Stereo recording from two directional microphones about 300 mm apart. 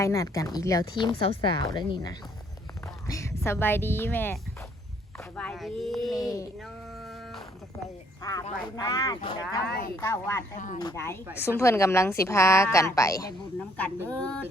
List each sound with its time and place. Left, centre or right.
0.0 s a woman's voice: centre
5.4 s speech: centre
6.1 s a woman's voice: centre
7.0 s a sound: centre
8.2 s a woman's voice: centre
9.6 s speech: left
10.0 s a woman's voice: centre
10.6 s speech: left
10.8 s a woman's voice: centre